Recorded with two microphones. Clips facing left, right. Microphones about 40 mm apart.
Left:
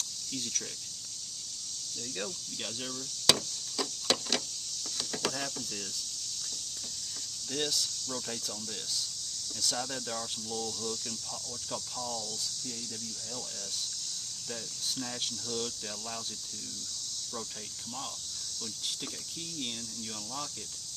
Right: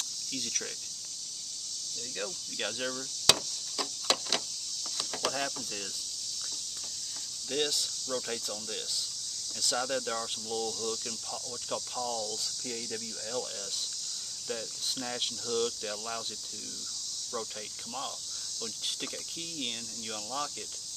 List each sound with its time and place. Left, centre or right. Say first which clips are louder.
0.4 s speech: right 1 dB; right
3.3 s a sound: even; centre
7.5 s speech: right 2 dB; right
9.6 s speech: right 4 dB; centre
14.5 s speech: right 3 dB; centre